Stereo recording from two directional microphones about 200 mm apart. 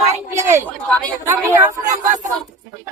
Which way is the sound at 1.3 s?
15° right (ahead or behind).